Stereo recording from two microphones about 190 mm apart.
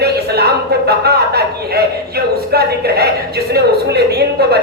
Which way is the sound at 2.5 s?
55° right (ahead or behind).